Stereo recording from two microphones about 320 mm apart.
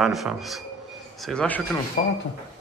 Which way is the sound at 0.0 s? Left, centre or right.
Centre.